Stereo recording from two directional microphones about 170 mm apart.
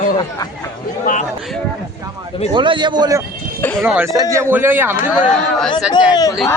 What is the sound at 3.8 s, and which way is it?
A man's voice, 10° right (ahead or behind).